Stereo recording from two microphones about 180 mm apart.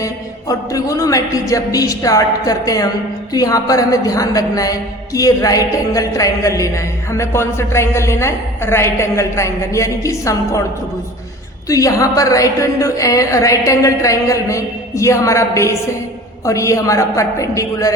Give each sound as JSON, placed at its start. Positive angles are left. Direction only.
{"t": 0.0, "sound": "a man's voice", "side_deg": 20}
{"t": 11.7, "sound": "speech", "side_deg": 20}